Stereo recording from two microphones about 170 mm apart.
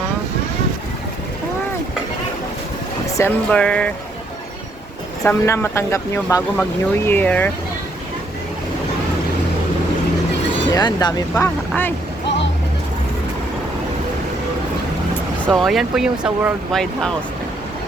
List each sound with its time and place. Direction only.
3.1 s a sound: 20° left (ahead or behind)
3.5 s speech: 5° left (ahead or behind)
5.2 s speech: 10° left (ahead or behind)
10.7 s speech: 25° left (ahead or behind)
11.7 s speech: 10° left (ahead or behind)
15.4 s speech: centre (ahead or behind)